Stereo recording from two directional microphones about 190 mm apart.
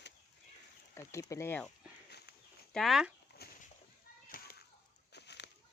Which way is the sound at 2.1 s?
55° left (ahead or behind).